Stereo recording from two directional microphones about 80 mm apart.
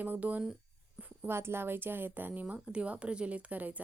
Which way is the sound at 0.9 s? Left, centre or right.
Centre.